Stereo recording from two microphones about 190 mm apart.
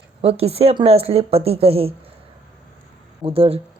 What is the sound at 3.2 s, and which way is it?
Speech, 30° right (ahead or behind).